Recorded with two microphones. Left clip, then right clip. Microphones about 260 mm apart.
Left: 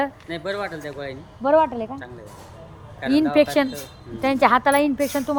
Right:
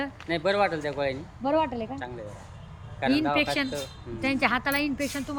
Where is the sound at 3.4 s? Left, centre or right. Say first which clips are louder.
Left 8 dB; centre.